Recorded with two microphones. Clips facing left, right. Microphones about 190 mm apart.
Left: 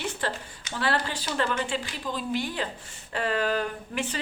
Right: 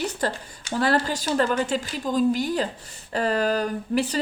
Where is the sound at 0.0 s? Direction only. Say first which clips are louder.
Right 4 dB; 40° right (ahead or behind).